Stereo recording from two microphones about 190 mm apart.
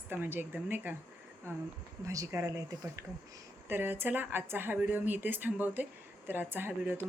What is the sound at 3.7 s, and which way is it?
Speech, 10° right (ahead or behind).